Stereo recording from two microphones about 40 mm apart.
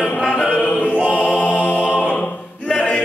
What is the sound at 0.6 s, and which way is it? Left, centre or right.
Music, left.